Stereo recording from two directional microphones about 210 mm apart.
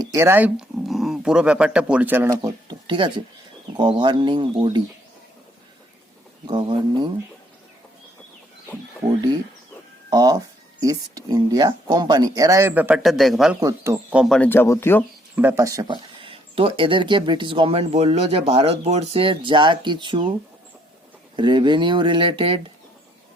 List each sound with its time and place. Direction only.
0.1 s speech: 10° right (ahead or behind)
2.4 s a sound: 20° right (ahead or behind)
3.8 s speech: 20° right (ahead or behind)
6.5 s speech: 20° right (ahead or behind)
10.1 s speech: 20° right (ahead or behind); by 13.6 s centre (ahead or behind)
13.6 s speech: 15° right (ahead or behind); by 15.0 s 10° left (ahead or behind)
15.4 s speech: 10° right (ahead or behind)
21.3 s speech: 20° right (ahead or behind)